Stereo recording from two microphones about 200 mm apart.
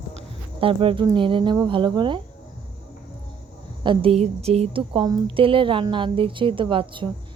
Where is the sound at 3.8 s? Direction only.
25° right (ahead or behind).